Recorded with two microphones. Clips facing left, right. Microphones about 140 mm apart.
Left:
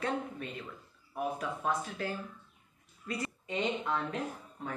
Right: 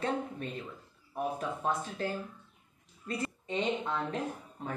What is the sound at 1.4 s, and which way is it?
Speech, 25° right (ahead or behind).